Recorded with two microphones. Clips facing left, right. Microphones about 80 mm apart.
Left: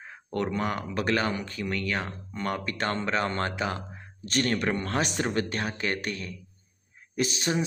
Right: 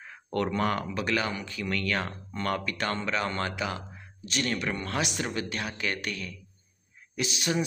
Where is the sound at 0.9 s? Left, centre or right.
Left.